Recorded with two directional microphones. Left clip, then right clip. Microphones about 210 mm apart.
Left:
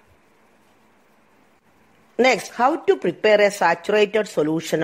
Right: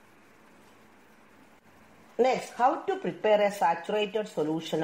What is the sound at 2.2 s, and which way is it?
Speech, 55° left (ahead or behind).